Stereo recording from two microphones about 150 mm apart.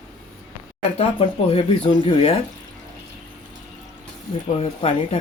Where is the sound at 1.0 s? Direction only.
40° left (ahead or behind).